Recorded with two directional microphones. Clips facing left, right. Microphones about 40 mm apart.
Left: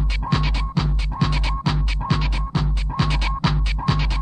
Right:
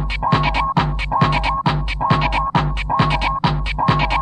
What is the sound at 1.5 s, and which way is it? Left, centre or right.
Music, right.